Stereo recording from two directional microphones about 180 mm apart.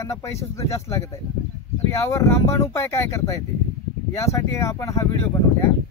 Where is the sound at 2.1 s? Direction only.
15° left (ahead or behind).